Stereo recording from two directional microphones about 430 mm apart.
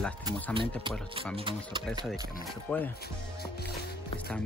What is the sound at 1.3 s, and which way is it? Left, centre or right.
Speech, centre.